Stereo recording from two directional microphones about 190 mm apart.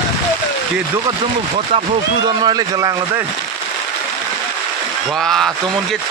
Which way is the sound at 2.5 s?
20° right (ahead or behind).